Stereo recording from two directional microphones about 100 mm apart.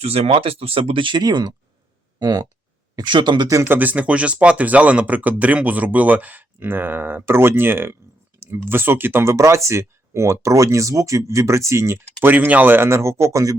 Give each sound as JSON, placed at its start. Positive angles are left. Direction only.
{"t": 0.0, "sound": "speech", "side_deg": -75}
{"t": 3.7, "sound": "speech", "side_deg": -15}